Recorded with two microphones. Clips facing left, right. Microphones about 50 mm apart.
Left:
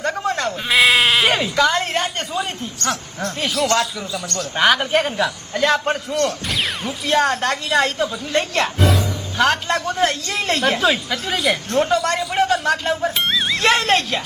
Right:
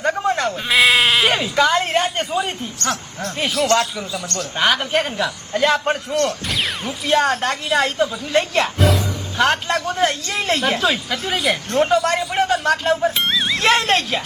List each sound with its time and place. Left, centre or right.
0.1 s bleat: centre
0.4 s sheep: centre
1.5 s a woman's voice: centre
4.1 s speech: right
4.5 s speech: centre